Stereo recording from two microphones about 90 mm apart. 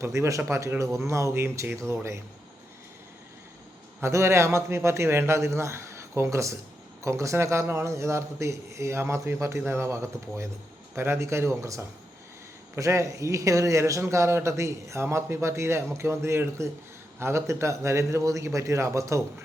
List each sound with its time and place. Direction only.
0.0 s a man's voice: 35° right (ahead or behind)
4.0 s a man's voice: 30° right (ahead or behind)